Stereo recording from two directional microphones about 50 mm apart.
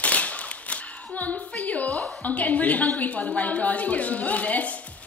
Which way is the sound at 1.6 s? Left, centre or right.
Left.